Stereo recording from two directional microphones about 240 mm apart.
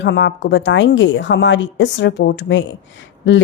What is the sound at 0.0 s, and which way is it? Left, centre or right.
A woman's voice, left.